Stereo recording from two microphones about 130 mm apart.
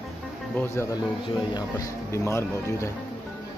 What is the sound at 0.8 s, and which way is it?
Speech, 20° left (ahead or behind).